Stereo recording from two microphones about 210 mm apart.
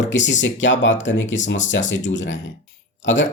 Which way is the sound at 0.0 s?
60° left (ahead or behind).